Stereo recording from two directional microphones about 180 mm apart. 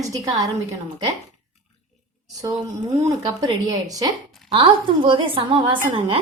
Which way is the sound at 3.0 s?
20° right (ahead or behind).